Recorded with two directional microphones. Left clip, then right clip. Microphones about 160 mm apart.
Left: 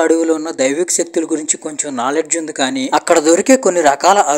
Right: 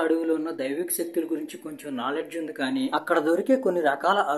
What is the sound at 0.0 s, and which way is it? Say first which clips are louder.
Speech: left 11 dB; 45° left (ahead or behind).